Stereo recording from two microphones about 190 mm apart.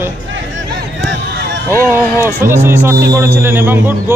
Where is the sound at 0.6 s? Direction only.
75° right (ahead or behind).